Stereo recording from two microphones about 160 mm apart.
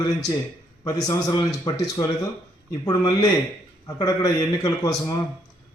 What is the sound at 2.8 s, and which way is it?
A man's voice, 25° left (ahead or behind).